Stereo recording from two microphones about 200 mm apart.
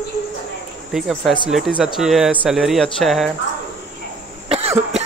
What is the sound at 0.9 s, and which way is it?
Cricket, centre (ahead or behind).